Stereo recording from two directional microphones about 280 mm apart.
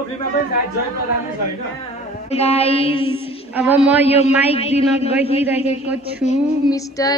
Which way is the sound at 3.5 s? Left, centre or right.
Centre.